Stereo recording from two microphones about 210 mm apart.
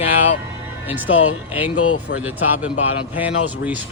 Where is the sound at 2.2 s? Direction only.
5° right (ahead or behind).